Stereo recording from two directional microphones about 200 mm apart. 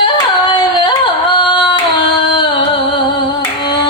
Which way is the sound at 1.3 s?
25° left (ahead or behind).